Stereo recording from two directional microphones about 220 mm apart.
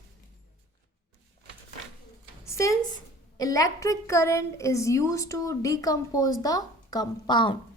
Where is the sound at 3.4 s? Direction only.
15° left (ahead or behind).